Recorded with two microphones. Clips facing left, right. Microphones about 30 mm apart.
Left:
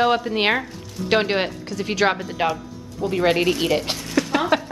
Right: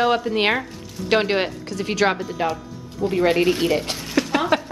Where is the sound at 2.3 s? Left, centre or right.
Left.